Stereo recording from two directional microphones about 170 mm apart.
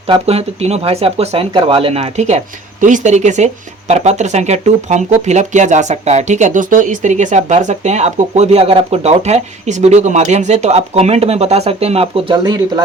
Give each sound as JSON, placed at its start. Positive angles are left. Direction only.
{"t": 0.1, "sound": "speech", "side_deg": -35}